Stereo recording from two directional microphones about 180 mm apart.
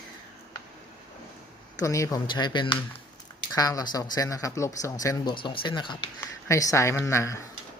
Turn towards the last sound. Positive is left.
turn(degrees=15)  # may be behind; listen again after turning